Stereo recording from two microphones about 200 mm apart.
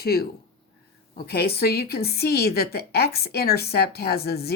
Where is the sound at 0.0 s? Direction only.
50° left (ahead or behind).